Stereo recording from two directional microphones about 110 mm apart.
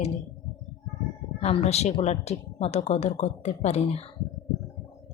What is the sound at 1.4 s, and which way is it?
A woman's voice, 80° left.